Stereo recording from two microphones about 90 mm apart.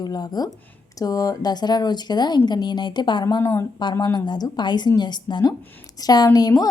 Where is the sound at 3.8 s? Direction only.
55° left (ahead or behind).